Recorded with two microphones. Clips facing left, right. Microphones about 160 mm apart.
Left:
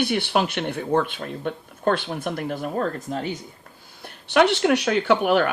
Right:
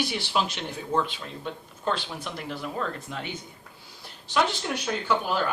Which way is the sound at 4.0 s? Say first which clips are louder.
Left 7 dB; 60° left (ahead or behind).